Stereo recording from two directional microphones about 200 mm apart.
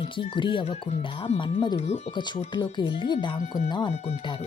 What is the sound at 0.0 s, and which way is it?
Speech, 25° left (ahead or behind).